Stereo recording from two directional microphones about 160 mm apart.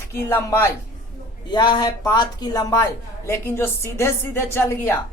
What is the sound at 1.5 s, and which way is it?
Speech, 25° left (ahead or behind).